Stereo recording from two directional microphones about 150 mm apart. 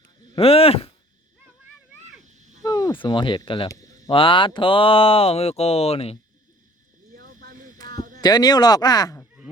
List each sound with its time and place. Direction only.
0.3 s speech: 40° left (ahead or behind)
2.2 s cat: 55° right (ahead or behind)
2.6 s speech: 25° left (ahead or behind)
3.7 s speech: 20° left (ahead or behind)
4.1 s speech: 35° left (ahead or behind)
7.1 s a sound: 65° right (ahead or behind)
8.2 s speech: 25° left (ahead or behind)